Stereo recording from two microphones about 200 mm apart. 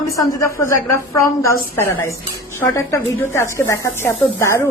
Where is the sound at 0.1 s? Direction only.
15° left (ahead or behind).